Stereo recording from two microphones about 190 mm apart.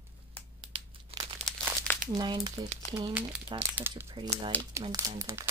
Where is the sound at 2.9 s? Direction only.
40° right (ahead or behind).